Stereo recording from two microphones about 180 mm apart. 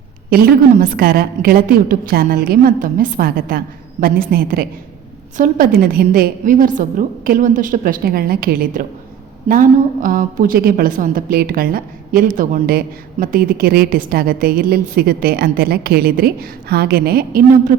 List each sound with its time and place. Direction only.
0.3 s a woman's voice: 55° right (ahead or behind)